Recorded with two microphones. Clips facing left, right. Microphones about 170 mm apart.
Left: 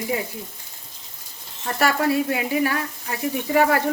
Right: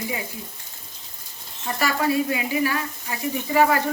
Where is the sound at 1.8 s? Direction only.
55° left (ahead or behind).